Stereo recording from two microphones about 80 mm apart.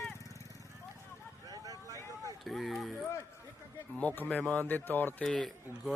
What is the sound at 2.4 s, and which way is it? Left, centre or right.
Speech, centre.